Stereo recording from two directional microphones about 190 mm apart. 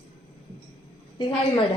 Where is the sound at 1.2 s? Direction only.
25° left (ahead or behind).